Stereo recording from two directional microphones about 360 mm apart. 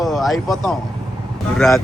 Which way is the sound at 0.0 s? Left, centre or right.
Centre.